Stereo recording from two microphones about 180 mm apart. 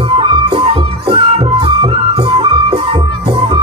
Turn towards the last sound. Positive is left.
turn(degrees=-30)  # may be behind; listen again after turning